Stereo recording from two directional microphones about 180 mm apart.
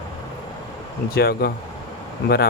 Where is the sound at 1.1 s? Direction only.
60° left (ahead or behind).